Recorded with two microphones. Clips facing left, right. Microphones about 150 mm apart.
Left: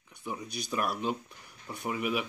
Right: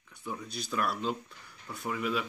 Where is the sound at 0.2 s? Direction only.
15° left (ahead or behind).